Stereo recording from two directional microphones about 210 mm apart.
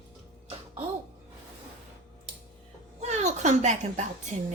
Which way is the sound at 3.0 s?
35° right (ahead or behind).